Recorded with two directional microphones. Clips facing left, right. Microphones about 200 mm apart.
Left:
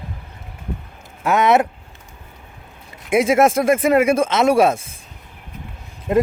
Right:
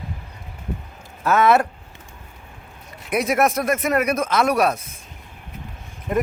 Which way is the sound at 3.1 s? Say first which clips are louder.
Left 5 dB; 25° left (ahead or behind).